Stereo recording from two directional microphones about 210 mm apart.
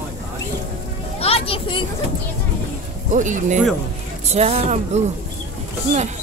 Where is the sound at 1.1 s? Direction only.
30° left (ahead or behind).